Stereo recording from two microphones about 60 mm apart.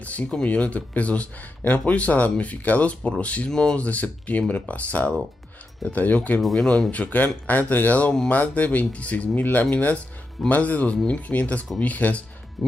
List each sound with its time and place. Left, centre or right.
0.0 s speech: left
3.8 s speech: left
6.4 s speech: centre
6.9 s speech: left
12.6 s speech: centre